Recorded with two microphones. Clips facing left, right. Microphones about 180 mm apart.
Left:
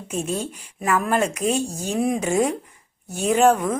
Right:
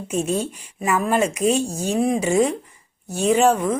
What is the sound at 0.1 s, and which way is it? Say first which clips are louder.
Speech: right 4 dB; 40° right (ahead or behind).